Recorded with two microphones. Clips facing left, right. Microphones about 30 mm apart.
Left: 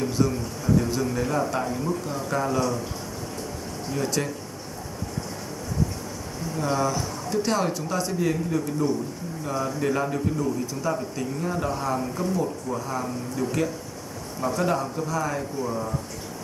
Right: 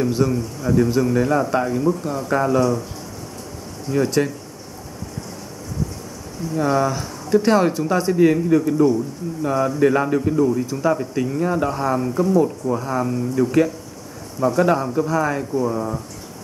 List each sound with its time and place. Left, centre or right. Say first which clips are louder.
0.0 s a man's voice: right 5 dB; centre
3.9 s a man's voice: right 8 dB; centre
6.6 s a man's voice: right 5 dB; centre